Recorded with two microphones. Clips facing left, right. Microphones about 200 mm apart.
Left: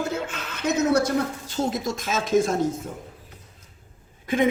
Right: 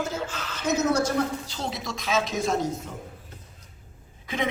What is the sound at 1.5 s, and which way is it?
A man's voice, 50° left (ahead or behind).